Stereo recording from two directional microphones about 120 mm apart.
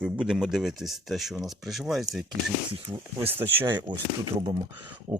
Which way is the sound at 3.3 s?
15° right (ahead or behind).